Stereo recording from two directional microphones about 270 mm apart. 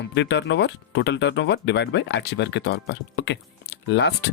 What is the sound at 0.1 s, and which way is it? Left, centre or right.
Speech, left.